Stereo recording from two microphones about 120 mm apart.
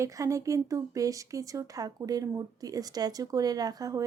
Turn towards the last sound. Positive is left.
turn(degrees=-30)  # may be behind; listen again after turning